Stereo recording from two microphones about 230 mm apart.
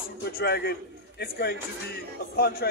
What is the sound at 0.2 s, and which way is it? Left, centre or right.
A man's voice, left.